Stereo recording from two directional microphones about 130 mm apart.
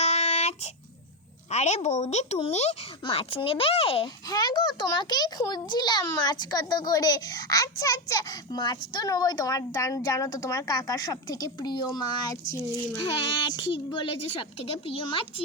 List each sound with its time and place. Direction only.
0.0 s a sound: 55° left (ahead or behind)
1.5 s speech: 60° left (ahead or behind)
3.0 s speech: 45° left (ahead or behind)
4.3 s a woman's voice: 30° left (ahead or behind)
13.1 s a woman's voice: 40° left (ahead or behind)